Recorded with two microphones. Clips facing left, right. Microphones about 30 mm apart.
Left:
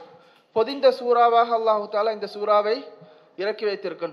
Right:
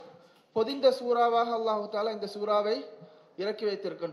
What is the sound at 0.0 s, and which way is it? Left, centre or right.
Speech, left.